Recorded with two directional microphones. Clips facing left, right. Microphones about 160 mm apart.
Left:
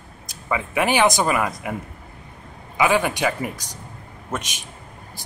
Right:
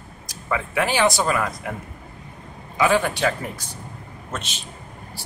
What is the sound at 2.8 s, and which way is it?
Speech, 15° left (ahead or behind).